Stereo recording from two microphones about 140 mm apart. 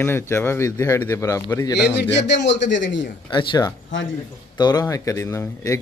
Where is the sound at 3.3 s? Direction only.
35° left (ahead or behind).